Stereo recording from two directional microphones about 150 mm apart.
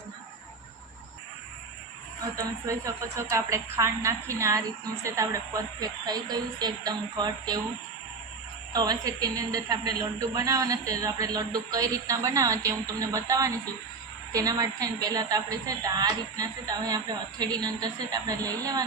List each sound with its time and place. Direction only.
2.3 s a woman's voice: 20° right (ahead or behind)
8.7 s a woman's voice: 25° right (ahead or behind)